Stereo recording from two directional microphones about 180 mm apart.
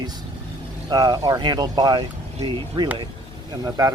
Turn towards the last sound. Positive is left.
turn(degrees=-20)  # may be behind; listen again after turning